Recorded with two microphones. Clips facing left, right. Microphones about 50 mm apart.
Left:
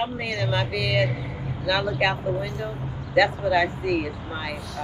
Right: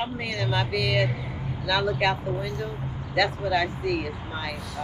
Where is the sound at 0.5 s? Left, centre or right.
Centre.